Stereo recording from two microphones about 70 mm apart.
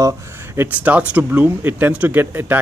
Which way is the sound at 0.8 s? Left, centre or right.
Right.